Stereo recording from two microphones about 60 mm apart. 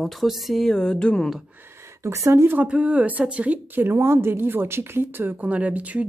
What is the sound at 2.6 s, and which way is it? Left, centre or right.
Speech, centre.